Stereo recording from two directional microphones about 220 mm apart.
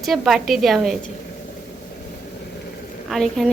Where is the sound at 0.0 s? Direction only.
Centre (ahead or behind).